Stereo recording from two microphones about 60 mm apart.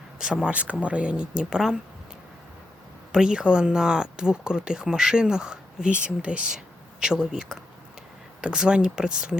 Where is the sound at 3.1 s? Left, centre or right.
Centre.